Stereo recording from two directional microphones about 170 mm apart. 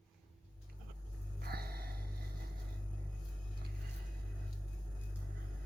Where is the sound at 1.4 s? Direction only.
65° right (ahead or behind).